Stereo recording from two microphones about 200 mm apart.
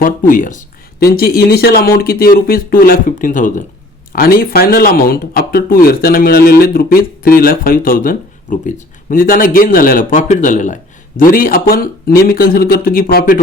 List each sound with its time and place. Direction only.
0.0 s speech: 45° left (ahead or behind)